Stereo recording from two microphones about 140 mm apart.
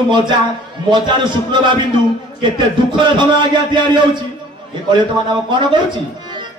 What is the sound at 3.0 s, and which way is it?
Speech, 35° right (ahead or behind).